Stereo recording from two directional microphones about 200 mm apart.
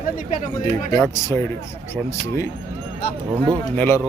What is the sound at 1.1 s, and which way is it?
Speech, 15° left (ahead or behind).